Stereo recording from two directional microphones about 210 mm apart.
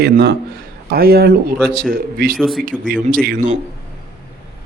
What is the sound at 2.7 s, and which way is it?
Speech, 40° right (ahead or behind).